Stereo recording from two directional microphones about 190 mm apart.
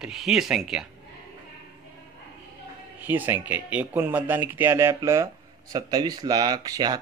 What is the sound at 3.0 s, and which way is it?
Speech, 10° right (ahead or behind).